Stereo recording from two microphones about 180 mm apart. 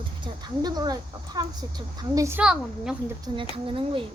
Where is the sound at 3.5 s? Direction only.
30° right (ahead or behind).